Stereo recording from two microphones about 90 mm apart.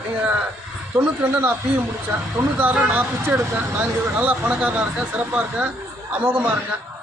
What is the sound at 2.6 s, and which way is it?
Speech, 20° right (ahead or behind).